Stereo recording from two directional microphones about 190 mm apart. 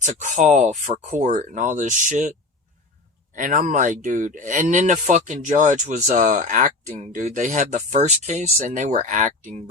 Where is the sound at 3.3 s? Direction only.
45° right (ahead or behind).